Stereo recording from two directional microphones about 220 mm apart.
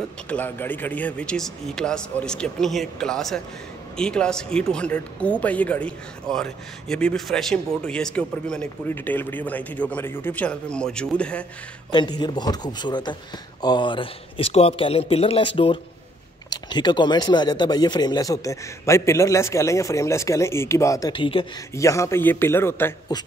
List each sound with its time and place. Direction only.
0.3 s speech: 10° left (ahead or behind)
11.9 s speech: 20° left (ahead or behind)